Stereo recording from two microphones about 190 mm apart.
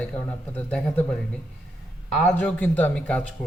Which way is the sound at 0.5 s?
10° left (ahead or behind).